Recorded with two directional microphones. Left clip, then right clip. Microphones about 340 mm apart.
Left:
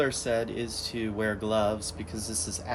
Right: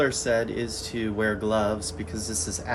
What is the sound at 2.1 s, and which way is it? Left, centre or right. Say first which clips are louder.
Speech: right 4 dB; centre.